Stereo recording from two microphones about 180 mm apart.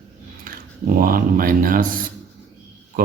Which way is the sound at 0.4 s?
50° right (ahead or behind).